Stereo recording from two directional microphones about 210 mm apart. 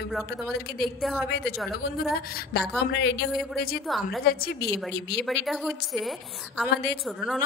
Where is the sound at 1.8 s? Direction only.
45° left (ahead or behind).